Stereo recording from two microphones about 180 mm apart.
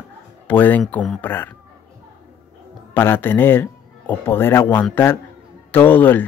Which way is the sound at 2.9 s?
10° left (ahead or behind).